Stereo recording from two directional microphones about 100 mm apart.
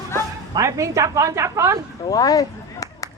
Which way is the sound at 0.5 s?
30° right (ahead or behind).